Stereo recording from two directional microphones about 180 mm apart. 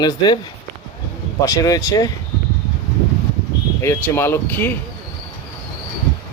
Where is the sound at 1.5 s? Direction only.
20° left (ahead or behind).